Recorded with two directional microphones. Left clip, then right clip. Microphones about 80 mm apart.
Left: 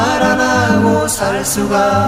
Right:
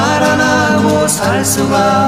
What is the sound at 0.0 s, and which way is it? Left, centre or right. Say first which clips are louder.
Music: right 1 dB; centre.